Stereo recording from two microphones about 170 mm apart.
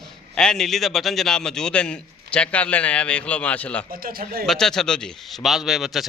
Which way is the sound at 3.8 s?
60° right (ahead or behind).